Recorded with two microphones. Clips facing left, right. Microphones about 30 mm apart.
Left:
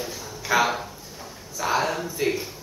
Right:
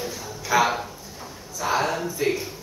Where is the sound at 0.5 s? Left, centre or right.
Left.